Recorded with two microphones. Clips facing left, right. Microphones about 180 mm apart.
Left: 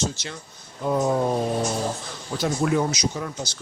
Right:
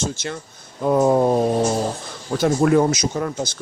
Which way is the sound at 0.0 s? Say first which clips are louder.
Right 3 dB; 50° right (ahead or behind).